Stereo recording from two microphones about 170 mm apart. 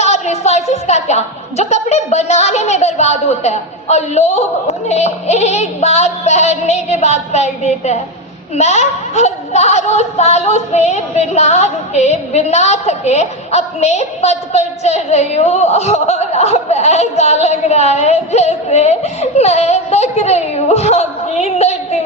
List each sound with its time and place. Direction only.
0.0 s a woman's voice: 40° left (ahead or behind)